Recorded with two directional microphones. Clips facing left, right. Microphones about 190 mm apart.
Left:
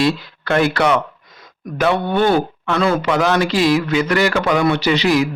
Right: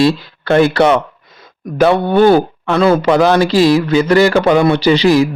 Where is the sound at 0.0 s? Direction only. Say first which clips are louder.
Right 5 dB; 30° right (ahead or behind).